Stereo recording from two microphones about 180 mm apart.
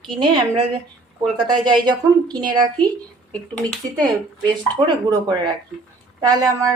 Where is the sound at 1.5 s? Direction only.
25° right (ahead or behind).